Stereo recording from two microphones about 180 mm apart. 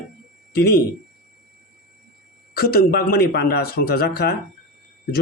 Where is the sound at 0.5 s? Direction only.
65° left (ahead or behind).